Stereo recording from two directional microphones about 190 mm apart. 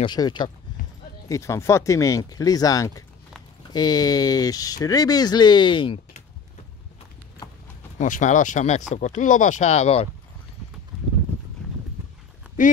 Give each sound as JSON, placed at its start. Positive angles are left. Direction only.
{"t": 0.0, "sound": "speech", "side_deg": 20}
{"t": 8.0, "sound": "speech", "side_deg": 40}
{"t": 12.6, "sound": "speech", "side_deg": 40}